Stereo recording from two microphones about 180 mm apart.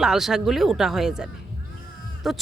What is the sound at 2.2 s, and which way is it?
Speech, centre (ahead or behind).